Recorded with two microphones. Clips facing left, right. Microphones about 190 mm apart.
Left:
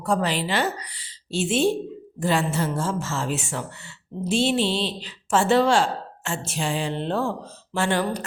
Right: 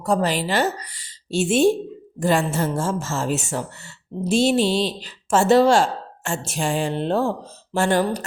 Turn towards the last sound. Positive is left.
turn(degrees=-45)  # may be behind; listen again after turning